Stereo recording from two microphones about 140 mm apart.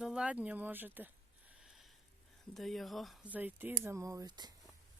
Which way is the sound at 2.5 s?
Centre (ahead or behind).